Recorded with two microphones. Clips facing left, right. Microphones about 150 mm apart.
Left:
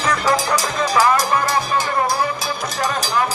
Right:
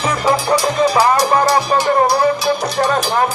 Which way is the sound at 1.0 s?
35° right (ahead or behind).